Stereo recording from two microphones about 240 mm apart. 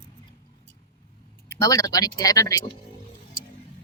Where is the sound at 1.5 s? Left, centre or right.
Centre.